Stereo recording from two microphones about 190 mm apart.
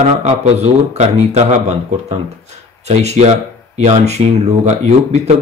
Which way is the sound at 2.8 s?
35° right (ahead or behind).